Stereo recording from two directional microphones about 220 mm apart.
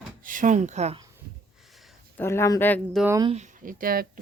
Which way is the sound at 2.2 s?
10° left (ahead or behind).